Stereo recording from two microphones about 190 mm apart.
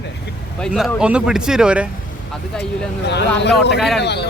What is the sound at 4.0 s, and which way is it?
Speech, 65° left (ahead or behind).